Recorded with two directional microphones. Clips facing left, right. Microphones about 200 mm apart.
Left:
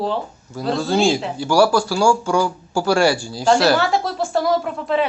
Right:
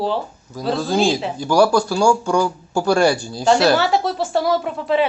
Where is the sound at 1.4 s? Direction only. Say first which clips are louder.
Right 1 dB; 10° left (ahead or behind).